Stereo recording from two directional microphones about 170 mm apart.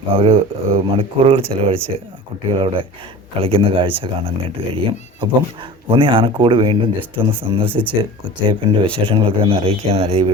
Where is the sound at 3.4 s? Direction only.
35° right (ahead or behind).